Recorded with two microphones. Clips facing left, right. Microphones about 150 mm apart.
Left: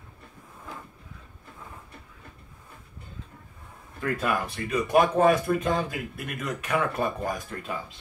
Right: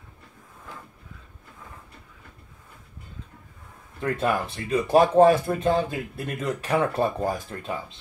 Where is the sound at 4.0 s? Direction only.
25° right (ahead or behind).